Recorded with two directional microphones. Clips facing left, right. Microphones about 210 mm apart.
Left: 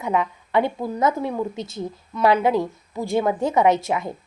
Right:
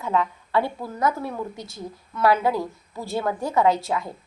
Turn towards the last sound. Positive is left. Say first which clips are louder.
# left 2 dB
turn(degrees=20)  # may be behind; listen again after turning